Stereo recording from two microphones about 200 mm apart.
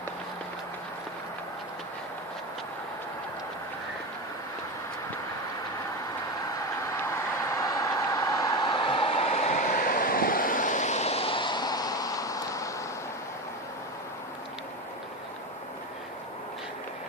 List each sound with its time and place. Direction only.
6.5 s vehicle: 15° left (ahead or behind)